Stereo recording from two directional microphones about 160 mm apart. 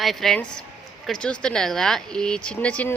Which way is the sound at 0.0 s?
Centre (ahead or behind).